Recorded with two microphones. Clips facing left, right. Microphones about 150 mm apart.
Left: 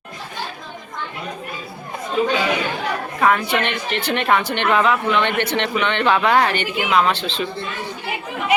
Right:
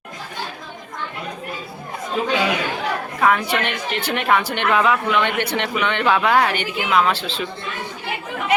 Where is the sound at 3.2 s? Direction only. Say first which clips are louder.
Left 1 dB; centre (ahead or behind).